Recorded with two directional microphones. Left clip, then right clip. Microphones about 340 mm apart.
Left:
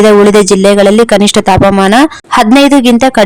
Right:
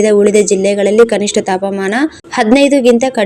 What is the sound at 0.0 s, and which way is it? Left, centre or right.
Speech, left.